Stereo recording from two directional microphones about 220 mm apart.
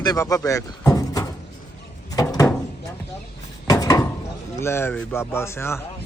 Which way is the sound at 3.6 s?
15° left (ahead or behind).